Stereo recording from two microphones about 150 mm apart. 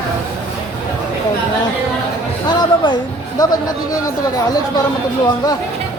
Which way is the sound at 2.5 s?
30° left (ahead or behind).